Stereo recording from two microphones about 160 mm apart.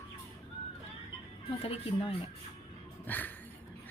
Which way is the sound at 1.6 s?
40° left (ahead or behind).